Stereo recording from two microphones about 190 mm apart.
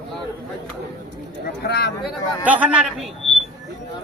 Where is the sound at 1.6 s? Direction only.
60° left (ahead or behind).